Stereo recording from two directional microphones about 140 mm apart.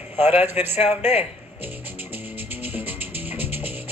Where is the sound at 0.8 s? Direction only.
50° left (ahead or behind).